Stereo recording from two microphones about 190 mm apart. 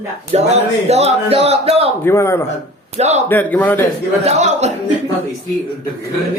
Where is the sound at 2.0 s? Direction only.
15° left (ahead or behind).